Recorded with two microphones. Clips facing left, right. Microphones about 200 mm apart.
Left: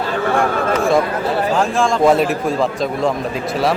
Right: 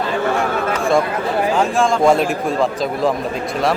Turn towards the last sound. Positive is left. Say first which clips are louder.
# even
turn(degrees=0)  # may be behind; listen again after turning